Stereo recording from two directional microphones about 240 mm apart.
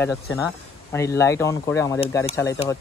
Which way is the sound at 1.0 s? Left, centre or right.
Centre.